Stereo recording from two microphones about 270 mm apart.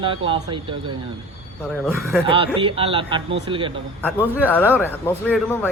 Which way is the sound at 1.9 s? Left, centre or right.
Centre.